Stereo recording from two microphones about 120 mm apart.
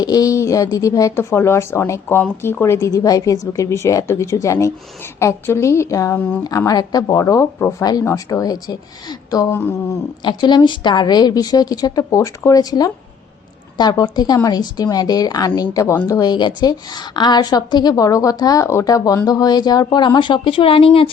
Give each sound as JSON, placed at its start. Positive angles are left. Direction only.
{"t": 0.0, "sound": "a woman's voice", "side_deg": 30}
{"t": 6.1, "sound": "speech", "side_deg": 15}
{"t": 6.4, "sound": "a woman's voice", "side_deg": 30}
{"t": 9.5, "sound": "a woman's voice", "side_deg": 20}
{"t": 10.2, "sound": "a woman's voice", "side_deg": 40}